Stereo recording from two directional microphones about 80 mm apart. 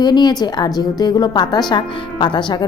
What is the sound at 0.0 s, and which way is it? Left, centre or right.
A woman's voice, left.